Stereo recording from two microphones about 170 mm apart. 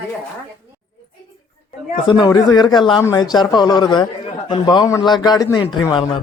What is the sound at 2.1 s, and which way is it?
A man's voice, 25° left (ahead or behind).